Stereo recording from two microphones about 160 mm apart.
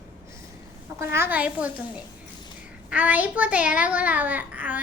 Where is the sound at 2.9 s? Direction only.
10° right (ahead or behind).